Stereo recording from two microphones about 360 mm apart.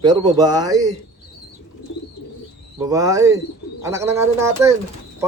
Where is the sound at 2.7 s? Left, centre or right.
Centre.